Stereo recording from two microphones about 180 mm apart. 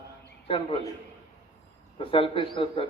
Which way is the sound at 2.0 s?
30° left (ahead or behind).